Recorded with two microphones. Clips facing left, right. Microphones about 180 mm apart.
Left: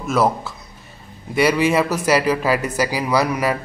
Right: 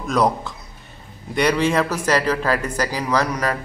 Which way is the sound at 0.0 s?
5° left (ahead or behind).